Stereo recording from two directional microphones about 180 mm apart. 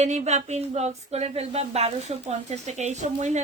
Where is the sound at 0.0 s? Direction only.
40° right (ahead or behind).